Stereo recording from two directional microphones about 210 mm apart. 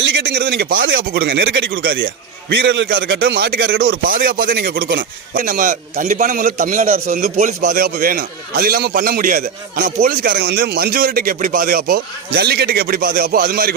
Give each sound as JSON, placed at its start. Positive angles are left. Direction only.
{"t": 0.0, "sound": "a man's voice", "side_deg": -55}